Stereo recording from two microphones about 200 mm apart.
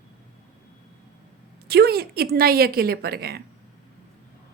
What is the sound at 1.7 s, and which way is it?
Speech, 50° right (ahead or behind).